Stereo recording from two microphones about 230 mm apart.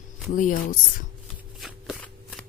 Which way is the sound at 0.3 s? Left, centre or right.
Left.